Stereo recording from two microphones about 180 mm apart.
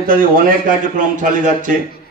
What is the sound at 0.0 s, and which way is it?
A man's voice, 50° right (ahead or behind).